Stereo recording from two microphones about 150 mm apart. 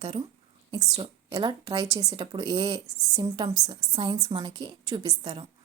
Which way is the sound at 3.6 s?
35° right (ahead or behind).